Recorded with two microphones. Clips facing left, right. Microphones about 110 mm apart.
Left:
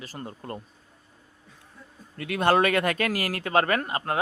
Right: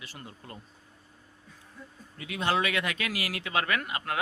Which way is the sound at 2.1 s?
60° left (ahead or behind).